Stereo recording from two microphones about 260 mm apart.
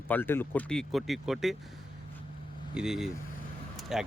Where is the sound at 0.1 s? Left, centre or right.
Centre.